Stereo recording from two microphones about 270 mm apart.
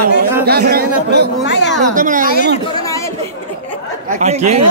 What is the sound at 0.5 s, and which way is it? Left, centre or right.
Speech, right.